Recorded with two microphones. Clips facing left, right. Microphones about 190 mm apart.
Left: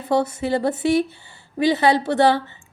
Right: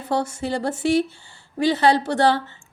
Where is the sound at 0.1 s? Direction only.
20° left (ahead or behind).